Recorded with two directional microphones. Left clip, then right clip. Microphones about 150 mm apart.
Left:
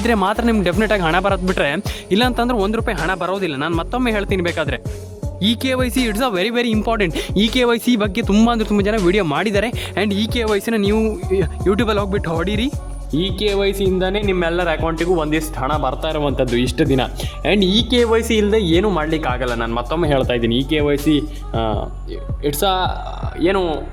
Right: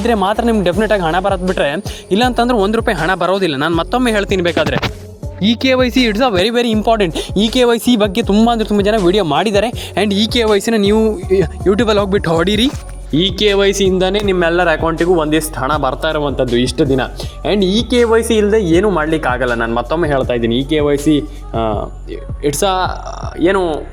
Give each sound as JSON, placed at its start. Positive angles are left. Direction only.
{"t": 0.0, "sound": "speech", "side_deg": -5}
{"t": 2.3, "sound": "speech", "side_deg": -25}
{"t": 7.1, "sound": "speech", "side_deg": 0}
{"t": 8.3, "sound": "speech", "side_deg": 0}
{"t": 9.9, "sound": "speech", "side_deg": -20}
{"t": 16.2, "sound": "speech", "side_deg": -10}
{"t": 20.0, "sound": "speech", "side_deg": -5}